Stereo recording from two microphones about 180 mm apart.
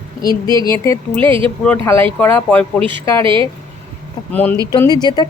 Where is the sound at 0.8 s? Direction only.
15° left (ahead or behind).